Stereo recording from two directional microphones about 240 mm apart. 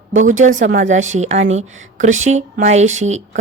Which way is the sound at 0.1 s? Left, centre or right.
Right.